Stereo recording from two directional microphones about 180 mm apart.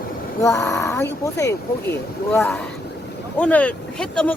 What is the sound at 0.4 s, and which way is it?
Speech, 15° left (ahead or behind).